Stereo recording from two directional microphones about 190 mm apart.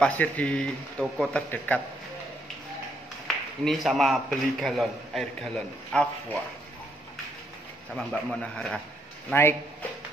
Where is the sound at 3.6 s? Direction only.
Centre (ahead or behind).